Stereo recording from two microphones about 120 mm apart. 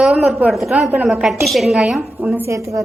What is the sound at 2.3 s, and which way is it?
Speech, 20° right (ahead or behind).